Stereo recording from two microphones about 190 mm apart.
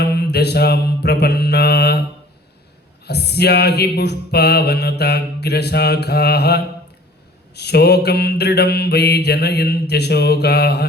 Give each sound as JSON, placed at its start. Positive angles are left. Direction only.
{"t": 0.0, "sound": "mantra", "side_deg": 60}
{"t": 3.1, "sound": "mantra", "side_deg": 60}